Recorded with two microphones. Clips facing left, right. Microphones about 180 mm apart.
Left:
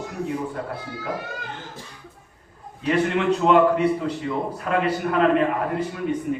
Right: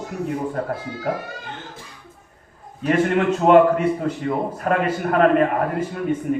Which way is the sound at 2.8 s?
50° right (ahead or behind).